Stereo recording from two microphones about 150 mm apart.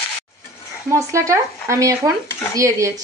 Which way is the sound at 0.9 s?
20° right (ahead or behind).